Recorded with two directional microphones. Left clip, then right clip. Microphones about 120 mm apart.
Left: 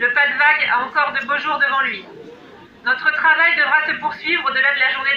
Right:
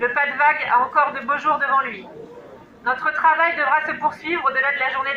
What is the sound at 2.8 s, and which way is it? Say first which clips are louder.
A woman's voice: left 2 dB; 40° right (ahead or behind).